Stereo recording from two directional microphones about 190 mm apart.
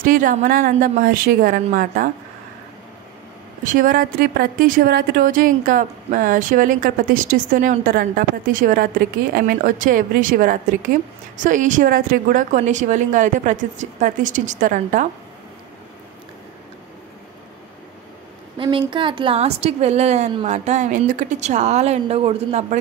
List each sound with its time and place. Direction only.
0.0 s a woman's voice: 45° right (ahead or behind)
3.6 s a woman's voice: 45° right (ahead or behind)
18.6 s a woman's voice: 25° right (ahead or behind)